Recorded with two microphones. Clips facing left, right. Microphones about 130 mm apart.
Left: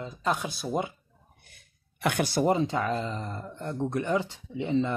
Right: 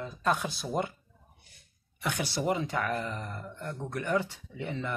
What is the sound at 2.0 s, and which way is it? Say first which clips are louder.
Speech: left 6 dB; 70° left (ahead or behind).